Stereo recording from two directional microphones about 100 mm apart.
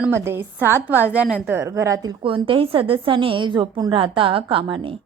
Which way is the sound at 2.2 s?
60° right (ahead or behind).